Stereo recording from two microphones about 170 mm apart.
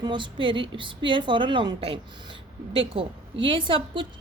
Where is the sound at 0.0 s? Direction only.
30° right (ahead or behind).